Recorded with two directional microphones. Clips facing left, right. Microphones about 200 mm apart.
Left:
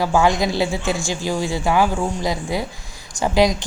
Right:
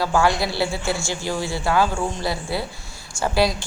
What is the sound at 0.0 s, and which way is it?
A woman's voice, 15° left (ahead or behind).